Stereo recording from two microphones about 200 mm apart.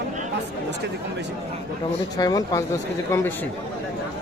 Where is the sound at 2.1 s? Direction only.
20° left (ahead or behind).